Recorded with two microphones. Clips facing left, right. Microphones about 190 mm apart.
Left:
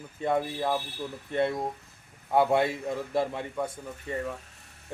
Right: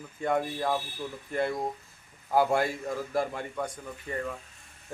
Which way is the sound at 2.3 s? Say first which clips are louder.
Left 2 dB; centre (ahead or behind).